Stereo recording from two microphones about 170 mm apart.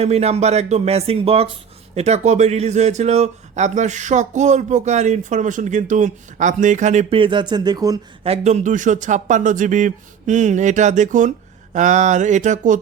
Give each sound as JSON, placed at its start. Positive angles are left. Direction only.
{"t": 0.0, "sound": "speech", "side_deg": -40}
{"t": 8.2, "sound": "speech", "side_deg": -40}